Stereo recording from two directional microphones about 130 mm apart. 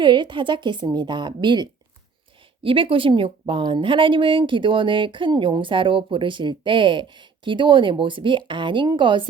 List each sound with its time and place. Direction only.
0.0 s speech: 35° right (ahead or behind)